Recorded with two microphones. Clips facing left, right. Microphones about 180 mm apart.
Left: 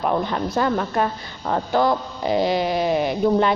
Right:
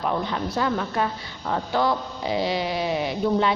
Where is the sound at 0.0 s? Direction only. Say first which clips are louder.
Left 4 dB; 50° left (ahead or behind).